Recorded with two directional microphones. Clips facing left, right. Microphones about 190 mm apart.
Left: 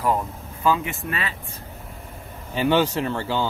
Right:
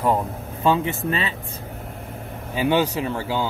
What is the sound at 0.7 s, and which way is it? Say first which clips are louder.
Speech: right 2 dB; 25° right (ahead or behind).